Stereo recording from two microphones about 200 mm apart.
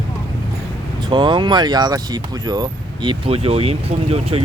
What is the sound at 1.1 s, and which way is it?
Speech, 25° right (ahead or behind).